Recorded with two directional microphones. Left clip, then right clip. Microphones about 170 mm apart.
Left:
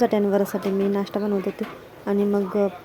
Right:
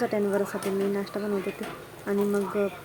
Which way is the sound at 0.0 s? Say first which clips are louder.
Left 6 dB; 30° left (ahead or behind).